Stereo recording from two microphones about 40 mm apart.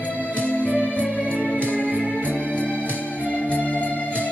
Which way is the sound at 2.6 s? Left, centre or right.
Left.